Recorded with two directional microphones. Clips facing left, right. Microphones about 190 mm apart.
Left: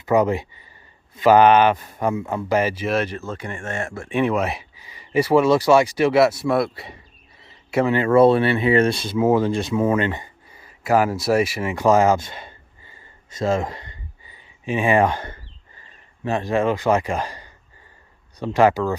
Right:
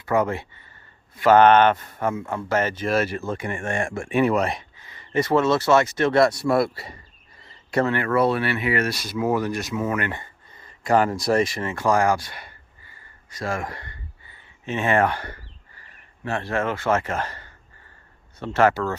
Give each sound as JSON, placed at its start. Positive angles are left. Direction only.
{"t": 0.0, "sound": "speech", "side_deg": 15}
{"t": 4.1, "sound": "speech", "side_deg": 0}
{"t": 7.4, "sound": "a sound", "side_deg": 5}
{"t": 7.9, "sound": "speech", "side_deg": 25}